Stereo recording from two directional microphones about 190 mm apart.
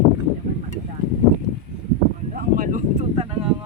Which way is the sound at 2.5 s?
45° right (ahead or behind).